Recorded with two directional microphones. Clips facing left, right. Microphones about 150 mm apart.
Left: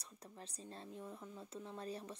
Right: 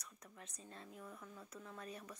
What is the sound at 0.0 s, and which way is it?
Speech, 30° left (ahead or behind).